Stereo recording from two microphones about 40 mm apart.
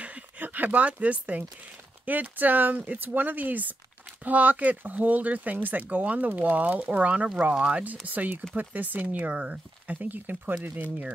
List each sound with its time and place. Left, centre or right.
0.4 s a sound: right
0.7 s speech: right
2.0 s speech: right
6.9 s speech: right
9.9 s speech: right